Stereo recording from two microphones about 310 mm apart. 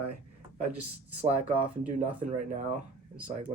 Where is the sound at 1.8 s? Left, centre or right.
Right.